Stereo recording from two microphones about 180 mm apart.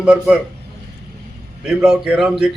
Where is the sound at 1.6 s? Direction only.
5° right (ahead or behind).